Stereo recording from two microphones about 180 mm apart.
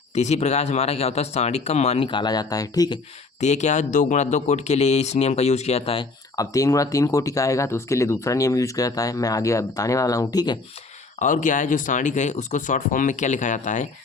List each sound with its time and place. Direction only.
0.1 s speech: 40° left (ahead or behind); by 3.0 s 20° left (ahead or behind)
3.4 s speech: 40° left (ahead or behind)
6.3 s speech: 20° left (ahead or behind)
11.2 s speech: 45° left (ahead or behind)